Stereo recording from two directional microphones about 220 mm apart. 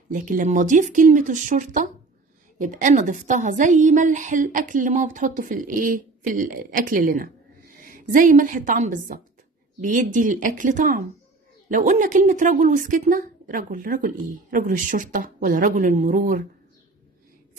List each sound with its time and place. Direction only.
0.1 s a woman's voice: 35° right (ahead or behind)